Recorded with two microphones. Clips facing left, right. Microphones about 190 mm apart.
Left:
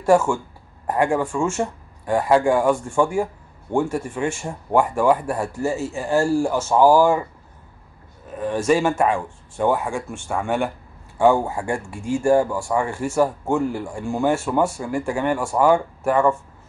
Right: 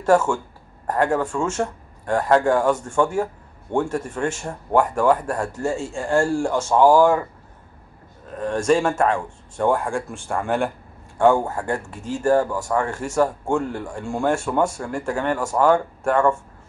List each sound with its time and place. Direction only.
0.0 s speech: 10° left (ahead or behind)
8.3 s speech: 5° left (ahead or behind)